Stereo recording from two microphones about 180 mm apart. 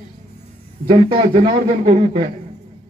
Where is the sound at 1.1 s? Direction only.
30° right (ahead or behind).